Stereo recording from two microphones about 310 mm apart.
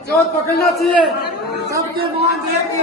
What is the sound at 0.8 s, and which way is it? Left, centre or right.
Speech, centre.